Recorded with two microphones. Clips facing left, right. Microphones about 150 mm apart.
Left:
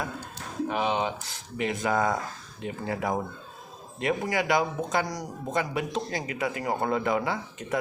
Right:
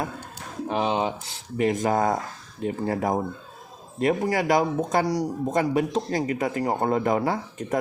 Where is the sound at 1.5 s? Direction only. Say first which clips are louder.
Right 4 dB; 40° right (ahead or behind).